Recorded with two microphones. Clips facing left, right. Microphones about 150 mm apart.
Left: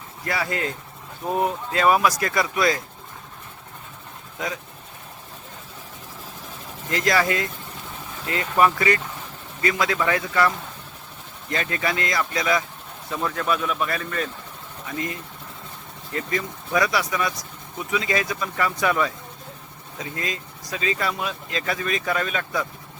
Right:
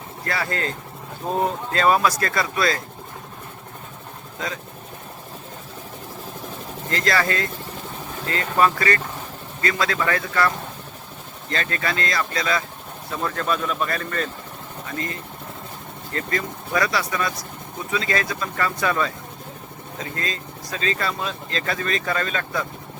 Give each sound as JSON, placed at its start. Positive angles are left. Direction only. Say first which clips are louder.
{"t": 0.3, "sound": "speech", "louder": "even", "side_deg": 10}
{"t": 6.9, "sound": "speech", "louder": "left 1 dB", "side_deg": 15}
{"t": 20.1, "sound": "speech", "louder": "left 1 dB", "side_deg": 15}